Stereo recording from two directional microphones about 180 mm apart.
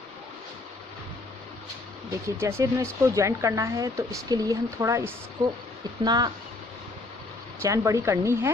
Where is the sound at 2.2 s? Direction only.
15° right (ahead or behind).